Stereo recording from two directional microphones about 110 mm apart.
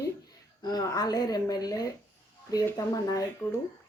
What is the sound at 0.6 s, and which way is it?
Speech, 40° left (ahead or behind).